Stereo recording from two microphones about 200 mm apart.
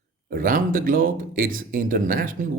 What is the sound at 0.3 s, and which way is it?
A man's voice, 45° right (ahead or behind).